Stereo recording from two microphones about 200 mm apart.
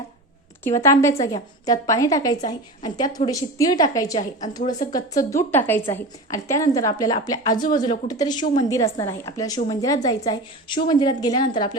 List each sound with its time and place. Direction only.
0.6 s a woman's voice: 15° left (ahead or behind)